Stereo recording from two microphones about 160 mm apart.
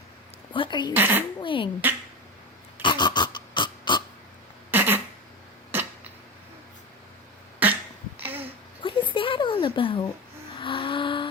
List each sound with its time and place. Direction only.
0.5 s a woman's voice: 30° left (ahead or behind)
0.9 s speech: 15° right (ahead or behind)
1.4 s speech: 30° left (ahead or behind)
2.8 s pig: 30° left (ahead or behind)
4.7 s a sound: 15° right (ahead or behind)
7.6 s cough: 10° right (ahead or behind)
8.2 s a sound: 10° right (ahead or behind)
8.8 s a sound: 30° left (ahead or behind)
10.6 s vehicle: 30° left (ahead or behind)